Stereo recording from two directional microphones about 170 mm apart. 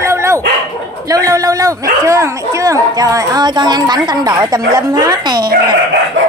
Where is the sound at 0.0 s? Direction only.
15° right (ahead or behind).